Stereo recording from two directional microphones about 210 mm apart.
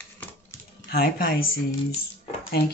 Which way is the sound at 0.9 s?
45° left (ahead or behind).